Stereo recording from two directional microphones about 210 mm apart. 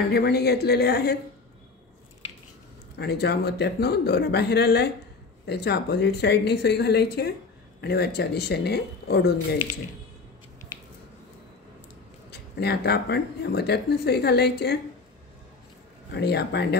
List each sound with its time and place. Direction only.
0.1 s speech: 50° left (ahead or behind)
3.0 s speech: 50° left (ahead or behind)
12.3 s speech: 50° left (ahead or behind)
16.1 s speech: 50° left (ahead or behind)